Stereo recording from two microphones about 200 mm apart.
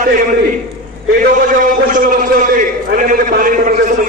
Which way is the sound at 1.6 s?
40° right (ahead or behind).